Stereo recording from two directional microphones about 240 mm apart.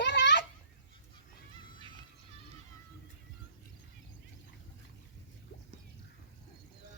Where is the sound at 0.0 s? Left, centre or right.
Left.